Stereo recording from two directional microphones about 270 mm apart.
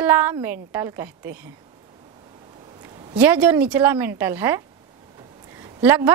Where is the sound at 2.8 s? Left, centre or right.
Centre.